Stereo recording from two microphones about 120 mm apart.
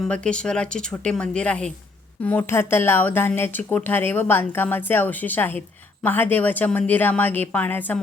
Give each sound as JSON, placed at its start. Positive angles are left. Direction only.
{"t": 0.0, "sound": "speech", "side_deg": 5}